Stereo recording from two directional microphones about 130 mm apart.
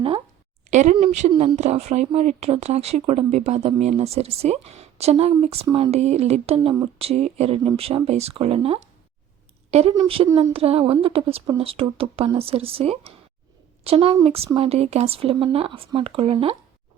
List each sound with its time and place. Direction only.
0.7 s speech: 65° right (ahead or behind)
10.2 s speech: 35° right (ahead or behind)
10.5 s speech: 50° right (ahead or behind)